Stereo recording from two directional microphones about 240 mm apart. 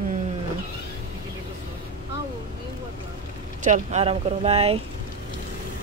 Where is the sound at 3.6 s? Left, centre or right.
Right.